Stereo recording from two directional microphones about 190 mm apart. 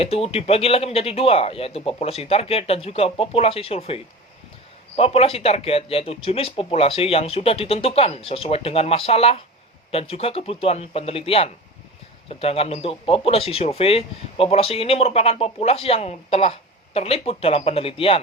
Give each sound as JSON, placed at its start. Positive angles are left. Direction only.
{"t": 0.0, "sound": "speech", "side_deg": 30}